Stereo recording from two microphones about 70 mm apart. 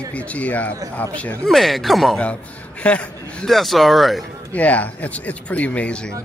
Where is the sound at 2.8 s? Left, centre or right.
Centre.